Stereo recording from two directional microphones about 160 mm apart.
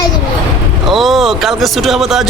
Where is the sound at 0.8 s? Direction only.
Centre (ahead or behind).